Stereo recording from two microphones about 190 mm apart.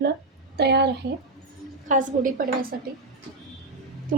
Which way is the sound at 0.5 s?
60° right (ahead or behind).